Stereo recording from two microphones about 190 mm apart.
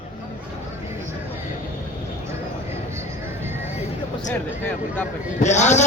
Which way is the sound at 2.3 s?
15° right (ahead or behind).